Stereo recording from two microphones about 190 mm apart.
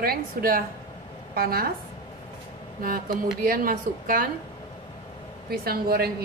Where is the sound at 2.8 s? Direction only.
50° right (ahead or behind).